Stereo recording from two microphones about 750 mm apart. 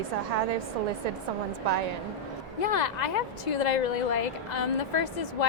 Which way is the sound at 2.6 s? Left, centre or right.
Left.